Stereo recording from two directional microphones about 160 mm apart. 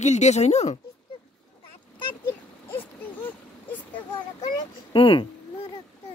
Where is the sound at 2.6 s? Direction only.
10° left (ahead or behind).